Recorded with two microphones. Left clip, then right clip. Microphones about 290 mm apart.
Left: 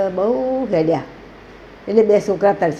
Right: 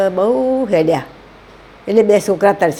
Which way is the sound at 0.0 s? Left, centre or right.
Right.